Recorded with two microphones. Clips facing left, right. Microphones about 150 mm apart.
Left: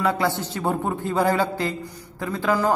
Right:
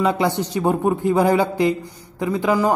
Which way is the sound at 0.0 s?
20° right (ahead or behind).